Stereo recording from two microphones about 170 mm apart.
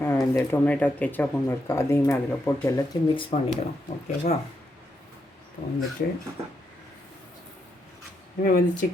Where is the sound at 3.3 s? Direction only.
35° left (ahead or behind).